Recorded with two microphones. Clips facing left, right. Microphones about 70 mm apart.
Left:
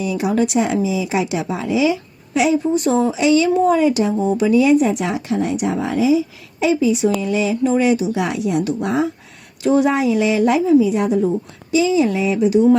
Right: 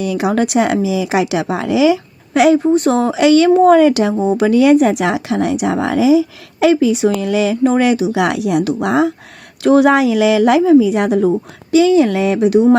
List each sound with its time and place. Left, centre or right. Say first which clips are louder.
0.0 s speech: right 3 dB; right
9.6 s speech: right 5 dB; right